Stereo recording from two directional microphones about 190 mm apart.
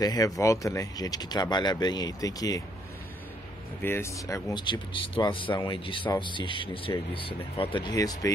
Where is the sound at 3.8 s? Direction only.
15° left (ahead or behind).